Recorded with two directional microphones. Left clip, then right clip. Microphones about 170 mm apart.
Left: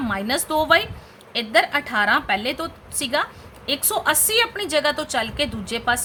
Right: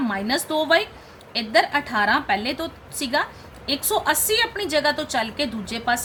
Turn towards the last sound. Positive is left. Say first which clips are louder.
# left 1 dB
turn(degrees=25)  # may be behind; listen again after turning